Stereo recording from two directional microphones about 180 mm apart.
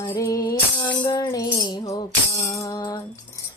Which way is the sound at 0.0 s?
15° left (ahead or behind).